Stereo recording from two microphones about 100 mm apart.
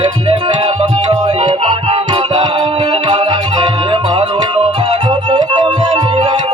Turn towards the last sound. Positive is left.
turn(degrees=-55)  # may be behind; listen again after turning